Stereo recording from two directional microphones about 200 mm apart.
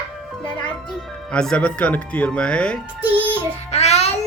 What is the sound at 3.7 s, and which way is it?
Music, 30° left (ahead or behind).